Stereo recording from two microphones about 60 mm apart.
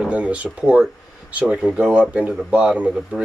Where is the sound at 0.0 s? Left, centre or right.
Centre.